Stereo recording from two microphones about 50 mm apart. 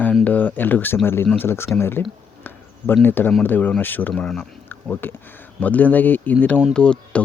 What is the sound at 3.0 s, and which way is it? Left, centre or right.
Speech, left.